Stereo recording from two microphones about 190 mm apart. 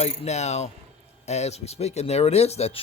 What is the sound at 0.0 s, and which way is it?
Speech, 35° left (ahead or behind).